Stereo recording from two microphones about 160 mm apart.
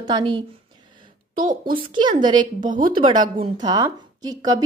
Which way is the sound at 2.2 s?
30° right (ahead or behind).